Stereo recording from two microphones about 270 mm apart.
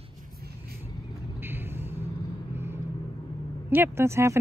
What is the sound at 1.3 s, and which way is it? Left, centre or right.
Vehicle, centre.